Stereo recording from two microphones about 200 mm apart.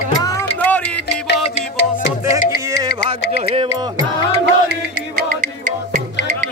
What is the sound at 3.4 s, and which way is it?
Music, 30° right (ahead or behind).